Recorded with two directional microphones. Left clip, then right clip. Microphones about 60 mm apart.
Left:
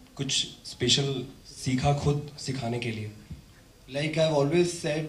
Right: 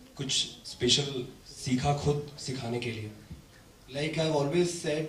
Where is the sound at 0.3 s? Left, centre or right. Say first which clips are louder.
Left 1 dB; left.